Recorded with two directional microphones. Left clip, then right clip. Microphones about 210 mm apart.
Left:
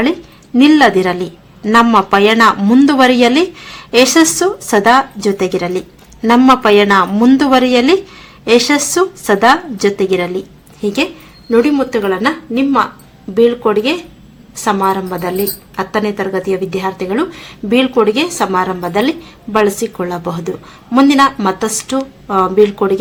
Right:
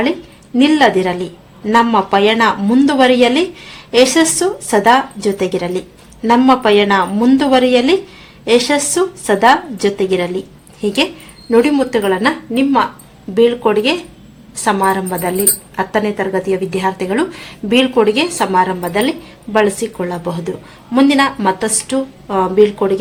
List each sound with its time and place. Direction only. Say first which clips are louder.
0.5 s a woman's voice: left 2 dB; 20° left (ahead or behind)